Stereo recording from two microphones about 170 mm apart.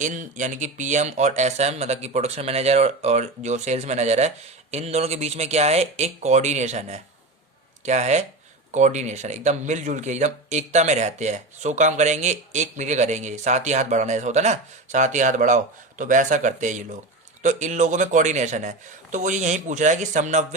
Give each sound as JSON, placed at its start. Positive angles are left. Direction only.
{"t": 0.0, "sound": "speech", "side_deg": -50}